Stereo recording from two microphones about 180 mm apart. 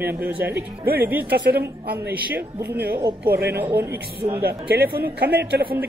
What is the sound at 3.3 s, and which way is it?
Speech, 60° right (ahead or behind).